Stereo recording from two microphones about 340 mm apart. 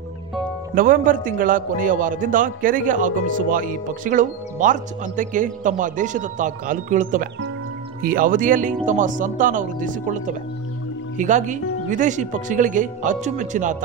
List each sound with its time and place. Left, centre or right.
0.7 s a man's voice: right